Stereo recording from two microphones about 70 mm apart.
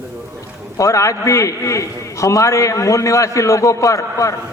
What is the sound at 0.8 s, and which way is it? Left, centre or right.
A man's voice, left.